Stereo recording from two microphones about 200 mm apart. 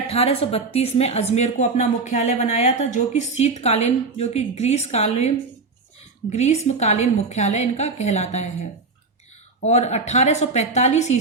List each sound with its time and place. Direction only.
0.1 s speech: 30° left (ahead or behind)
6.3 s speech: 35° left (ahead or behind)
9.6 s speech: 35° left (ahead or behind)